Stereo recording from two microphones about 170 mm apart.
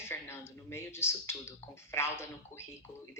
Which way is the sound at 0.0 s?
15° left (ahead or behind).